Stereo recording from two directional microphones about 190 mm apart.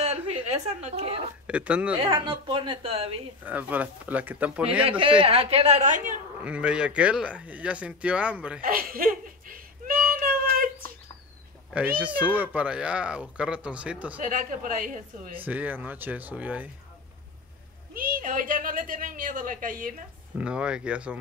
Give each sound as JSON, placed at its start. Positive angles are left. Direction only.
{"t": 0.0, "sound": "a sound", "side_deg": -35}
{"t": 0.5, "sound": "a woman's voice", "side_deg": -35}
{"t": 1.5, "sound": "speech", "side_deg": -5}
{"t": 2.0, "sound": "a woman's voice", "side_deg": -25}
{"t": 3.4, "sound": "speech", "side_deg": -10}
{"t": 4.8, "sound": "a woman's voice", "side_deg": -30}
{"t": 6.4, "sound": "speech", "side_deg": -5}
{"t": 8.5, "sound": "a sound", "side_deg": -50}
{"t": 11.7, "sound": "speech", "side_deg": -10}
{"t": 14.2, "sound": "a woman's voice", "side_deg": -45}
{"t": 15.3, "sound": "speech", "side_deg": -10}
{"t": 17.9, "sound": "a woman's voice", "side_deg": -50}
{"t": 20.3, "sound": "speech", "side_deg": -5}